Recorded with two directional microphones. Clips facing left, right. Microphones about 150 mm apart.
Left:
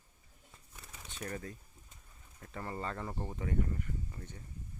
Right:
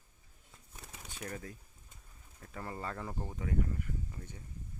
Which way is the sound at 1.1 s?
5° right (ahead or behind).